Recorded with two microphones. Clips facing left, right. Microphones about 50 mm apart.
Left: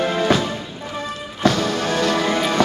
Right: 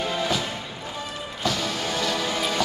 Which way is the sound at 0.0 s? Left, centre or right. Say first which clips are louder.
Left 7 dB; left.